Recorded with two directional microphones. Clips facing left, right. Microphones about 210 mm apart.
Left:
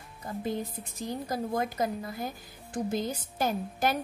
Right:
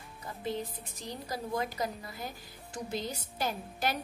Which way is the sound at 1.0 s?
50° left (ahead or behind).